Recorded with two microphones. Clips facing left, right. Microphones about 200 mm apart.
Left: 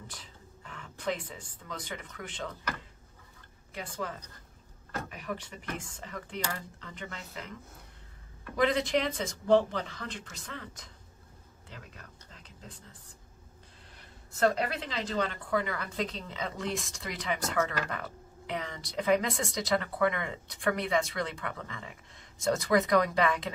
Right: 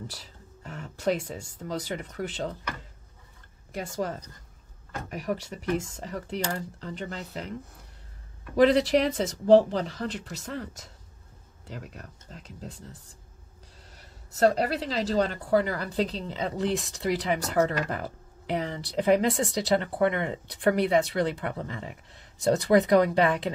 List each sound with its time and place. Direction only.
0.7 s a sound: 40° right (ahead or behind)
1.5 s speech: 40° right (ahead or behind)
3.7 s speech: 45° right (ahead or behind)
8.5 s speech: 35° right (ahead or behind)
11.7 s speech: 45° right (ahead or behind)
13.9 s speech: 40° right (ahead or behind)